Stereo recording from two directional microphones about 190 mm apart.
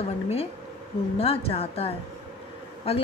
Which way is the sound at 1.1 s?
30° left (ahead or behind).